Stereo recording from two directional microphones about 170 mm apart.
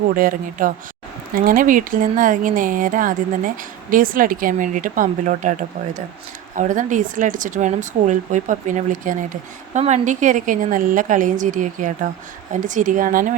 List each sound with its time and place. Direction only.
0.2 s speech: 55° right (ahead or behind)